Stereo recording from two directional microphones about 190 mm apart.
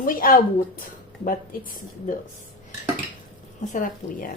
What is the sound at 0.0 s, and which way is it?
Speech, 45° left (ahead or behind).